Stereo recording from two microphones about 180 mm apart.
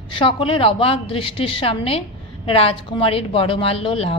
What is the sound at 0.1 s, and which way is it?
A woman's voice, 30° left (ahead or behind).